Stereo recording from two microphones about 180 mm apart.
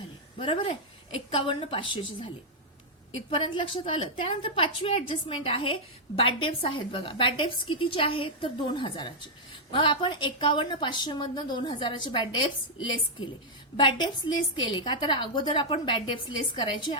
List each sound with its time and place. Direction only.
0.3 s a woman's voice: 30° left (ahead or behind)
3.2 s a woman's voice: 30° left (ahead or behind)
13.7 s a woman's voice: 25° left (ahead or behind)